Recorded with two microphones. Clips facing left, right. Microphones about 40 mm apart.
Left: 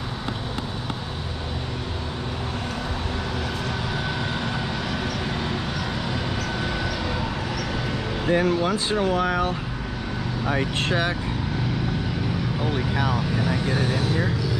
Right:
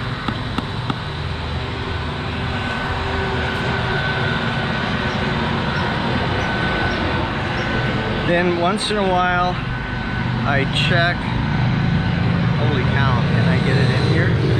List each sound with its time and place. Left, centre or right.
3.6 s vehicle: right
7.7 s speech: right